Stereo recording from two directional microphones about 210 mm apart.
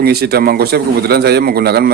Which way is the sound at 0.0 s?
50° right (ahead or behind).